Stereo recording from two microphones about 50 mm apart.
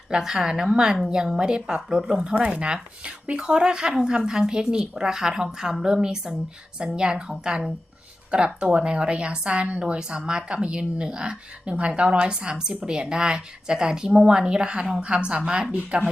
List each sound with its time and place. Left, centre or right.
0.1 s a woman's voice: centre